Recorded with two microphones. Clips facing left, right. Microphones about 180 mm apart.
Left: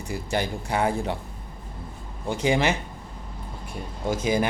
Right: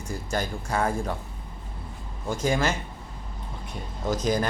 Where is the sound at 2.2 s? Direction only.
65° left (ahead or behind).